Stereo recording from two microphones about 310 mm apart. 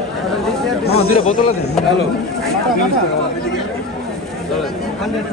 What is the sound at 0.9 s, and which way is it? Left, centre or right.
Speech, left.